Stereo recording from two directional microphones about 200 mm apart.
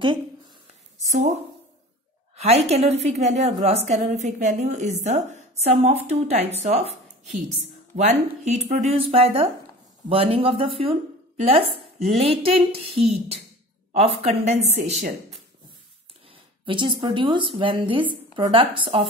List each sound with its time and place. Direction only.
0.9 s a woman's voice: 35° right (ahead or behind)
2.3 s a woman's voice: 30° right (ahead or behind)
12.0 s speech: centre (ahead or behind)
12.4 s a woman's voice: 30° right (ahead or behind)
16.3 s speech: 25° right (ahead or behind)